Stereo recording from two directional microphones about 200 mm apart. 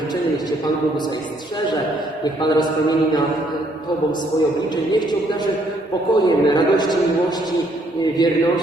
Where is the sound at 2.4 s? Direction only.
20° left (ahead or behind).